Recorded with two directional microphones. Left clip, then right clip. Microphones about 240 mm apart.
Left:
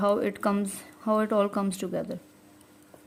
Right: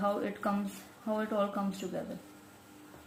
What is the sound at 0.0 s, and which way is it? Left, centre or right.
Speech, left.